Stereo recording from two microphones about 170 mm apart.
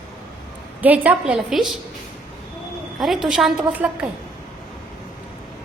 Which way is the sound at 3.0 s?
Centre (ahead or behind).